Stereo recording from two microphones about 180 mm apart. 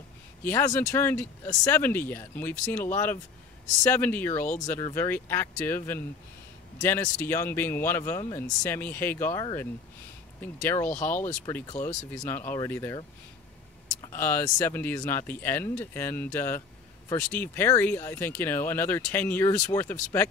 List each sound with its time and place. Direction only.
0.4 s speech: 15° left (ahead or behind)
14.1 s speech: 10° left (ahead or behind)